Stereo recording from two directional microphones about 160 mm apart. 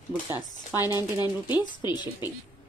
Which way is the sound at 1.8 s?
25° left (ahead or behind).